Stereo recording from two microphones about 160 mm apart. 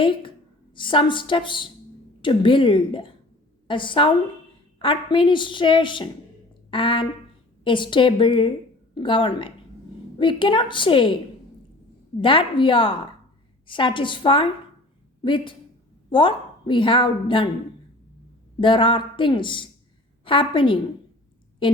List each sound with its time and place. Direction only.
0.0 s a woman's voice: 30° left (ahead or behind)
12.2 s a woman's voice: 30° left (ahead or behind)
18.6 s a woman's voice: 30° left (ahead or behind)